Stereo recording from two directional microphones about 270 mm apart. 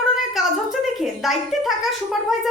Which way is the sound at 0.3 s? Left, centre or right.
Centre.